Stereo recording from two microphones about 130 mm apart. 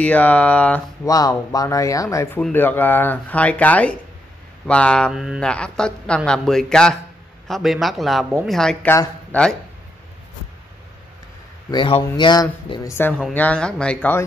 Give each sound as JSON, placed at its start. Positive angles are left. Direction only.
{"t": 0.0, "sound": "speech", "side_deg": 10}
{"t": 1.0, "sound": "speech", "side_deg": 30}
{"t": 5.1, "sound": "a man's voice", "side_deg": -5}
{"t": 5.4, "sound": "a man's voice", "side_deg": 5}
{"t": 8.8, "sound": "speech", "side_deg": 20}
{"t": 9.3, "sound": "speech", "side_deg": 5}
{"t": 11.7, "sound": "speech", "side_deg": 40}
{"t": 12.8, "sound": "speech", "side_deg": 15}